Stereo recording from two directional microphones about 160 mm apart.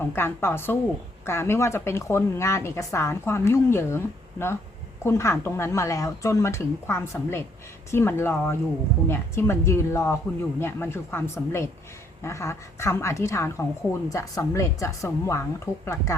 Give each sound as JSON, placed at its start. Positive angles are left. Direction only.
{"t": 0.0, "sound": "a woman's voice", "side_deg": 15}